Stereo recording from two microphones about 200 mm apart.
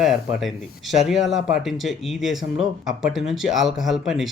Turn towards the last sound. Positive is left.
turn(degrees=0)  # may be behind; listen again after turning